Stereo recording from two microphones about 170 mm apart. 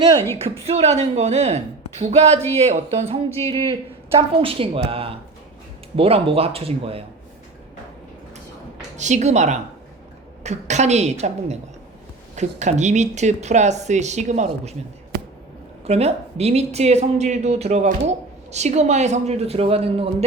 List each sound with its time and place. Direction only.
0.6 s speech: 40° right (ahead or behind)
9.0 s a woman's voice: 45° right (ahead or behind)
15.9 s speech: 40° right (ahead or behind)